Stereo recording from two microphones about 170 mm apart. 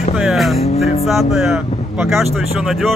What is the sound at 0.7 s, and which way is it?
Speech, 40° left (ahead or behind).